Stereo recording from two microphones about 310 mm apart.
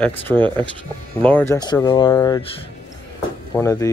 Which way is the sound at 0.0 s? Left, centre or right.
Centre.